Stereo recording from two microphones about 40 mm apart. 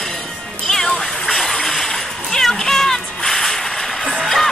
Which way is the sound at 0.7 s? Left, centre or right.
Centre.